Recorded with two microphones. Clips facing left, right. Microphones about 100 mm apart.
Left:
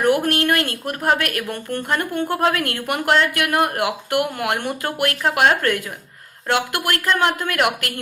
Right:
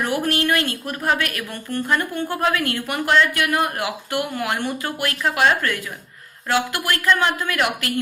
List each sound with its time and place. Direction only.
0.0 s a woman's voice: 55° left (ahead or behind)